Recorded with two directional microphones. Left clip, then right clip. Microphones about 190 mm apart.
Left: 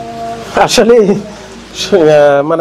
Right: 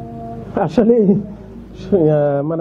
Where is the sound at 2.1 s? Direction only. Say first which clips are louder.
Left 10 dB; 15° left (ahead or behind).